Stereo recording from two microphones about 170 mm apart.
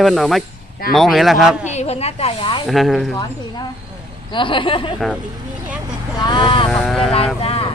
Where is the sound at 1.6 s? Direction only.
40° left (ahead or behind).